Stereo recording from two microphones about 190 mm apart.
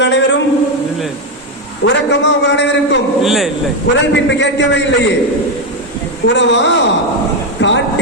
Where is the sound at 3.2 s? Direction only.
Centre (ahead or behind).